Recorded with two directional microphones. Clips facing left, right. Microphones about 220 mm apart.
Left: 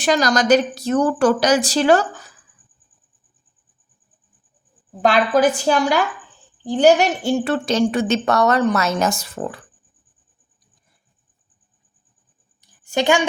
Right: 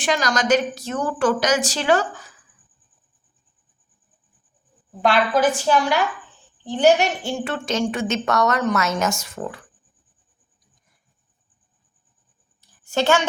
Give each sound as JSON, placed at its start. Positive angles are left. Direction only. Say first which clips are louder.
{"t": 0.0, "sound": "a woman's voice", "louder": "left 4 dB", "side_deg": 40}
{"t": 5.1, "sound": "a woman's voice", "louder": "left 3 dB", "side_deg": 40}
{"t": 12.8, "sound": "a woman's voice", "louder": "left 2 dB", "side_deg": 15}